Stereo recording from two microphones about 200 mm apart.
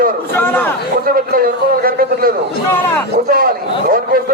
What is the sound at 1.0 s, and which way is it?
A man's voice, 50° right (ahead or behind).